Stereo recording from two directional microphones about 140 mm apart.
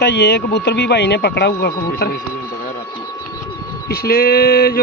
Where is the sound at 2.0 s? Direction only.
90° left.